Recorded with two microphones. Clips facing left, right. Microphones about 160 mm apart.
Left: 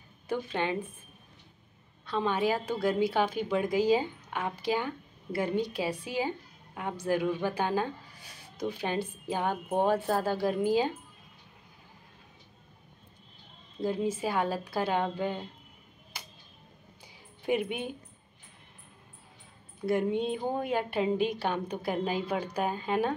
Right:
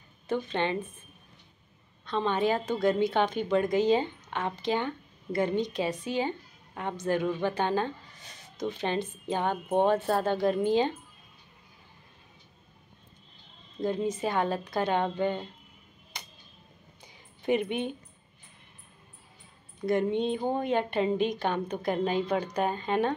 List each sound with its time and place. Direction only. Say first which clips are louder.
0.3 s a woman's voice: right 2 dB; 10° left (ahead or behind)
2.0 s a woman's voice: right 1 dB; 5° left (ahead or behind)
13.7 s a woman's voice: right 1 dB; 5° left (ahead or behind)
16.1 s tick-tock: right 1 dB; 5° left (ahead or behind)
17.0 s a sound: right 2 dB; 10° left (ahead or behind)
19.8 s a woman's voice: right 2 dB; 5° left (ahead or behind)